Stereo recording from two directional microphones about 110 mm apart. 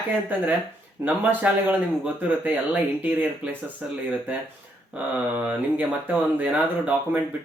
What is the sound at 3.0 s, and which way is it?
Speech, 15° right (ahead or behind).